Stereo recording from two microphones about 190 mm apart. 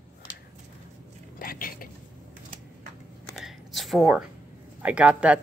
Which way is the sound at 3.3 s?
Centre (ahead or behind).